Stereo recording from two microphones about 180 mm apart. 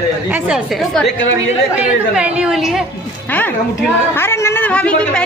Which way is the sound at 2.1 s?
5° right (ahead or behind).